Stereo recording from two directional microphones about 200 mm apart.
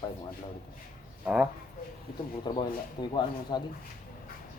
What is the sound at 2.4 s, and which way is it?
Speech, 20° left (ahead or behind).